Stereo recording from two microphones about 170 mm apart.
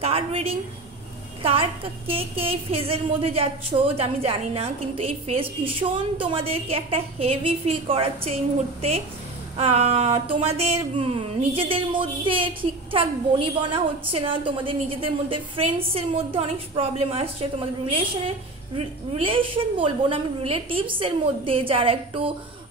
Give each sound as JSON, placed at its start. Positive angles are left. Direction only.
{"t": 0.0, "sound": "a woman's voice", "side_deg": -35}
{"t": 9.6, "sound": "a woman's voice", "side_deg": -35}